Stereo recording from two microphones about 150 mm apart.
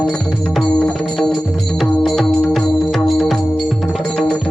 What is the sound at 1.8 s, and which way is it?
Music, centre (ahead or behind).